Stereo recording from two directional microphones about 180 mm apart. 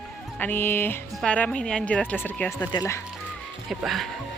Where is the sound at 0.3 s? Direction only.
10° left (ahead or behind).